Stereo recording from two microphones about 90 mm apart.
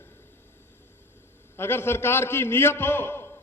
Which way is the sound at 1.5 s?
25° left (ahead or behind).